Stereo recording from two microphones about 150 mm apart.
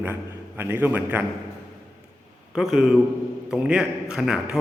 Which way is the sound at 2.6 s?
5° right (ahead or behind).